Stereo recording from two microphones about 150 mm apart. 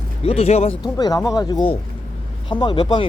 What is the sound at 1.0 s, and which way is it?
Speech, 25° left (ahead or behind).